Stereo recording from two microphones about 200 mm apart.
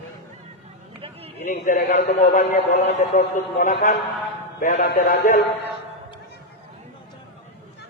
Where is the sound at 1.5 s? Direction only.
45° left (ahead or behind).